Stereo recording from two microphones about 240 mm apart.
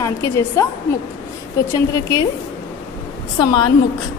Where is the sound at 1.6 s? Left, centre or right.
Centre.